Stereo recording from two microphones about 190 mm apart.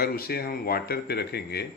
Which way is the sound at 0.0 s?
55° left (ahead or behind).